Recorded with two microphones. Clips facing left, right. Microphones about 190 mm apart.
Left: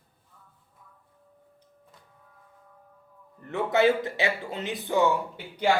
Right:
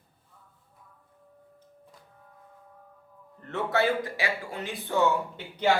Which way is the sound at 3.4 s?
15° left (ahead or behind).